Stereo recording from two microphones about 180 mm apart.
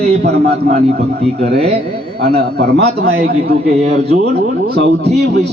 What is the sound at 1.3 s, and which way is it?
Speech, 35° right (ahead or behind).